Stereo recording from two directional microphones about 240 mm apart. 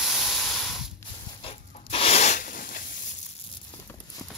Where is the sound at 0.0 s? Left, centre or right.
Centre.